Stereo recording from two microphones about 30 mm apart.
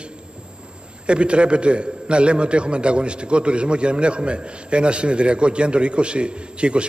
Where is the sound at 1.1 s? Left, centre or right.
Right.